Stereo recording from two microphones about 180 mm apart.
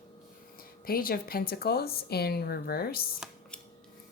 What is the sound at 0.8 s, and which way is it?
Speech, 55° left (ahead or behind).